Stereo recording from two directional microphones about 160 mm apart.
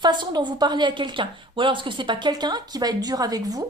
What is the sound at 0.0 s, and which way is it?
A woman's voice, 30° right (ahead or behind).